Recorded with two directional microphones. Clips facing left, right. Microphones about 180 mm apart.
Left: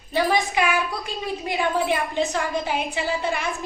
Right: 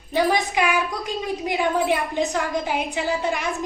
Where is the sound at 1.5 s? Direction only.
10° right (ahead or behind).